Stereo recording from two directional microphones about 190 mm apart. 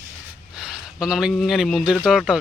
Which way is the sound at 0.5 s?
5° right (ahead or behind).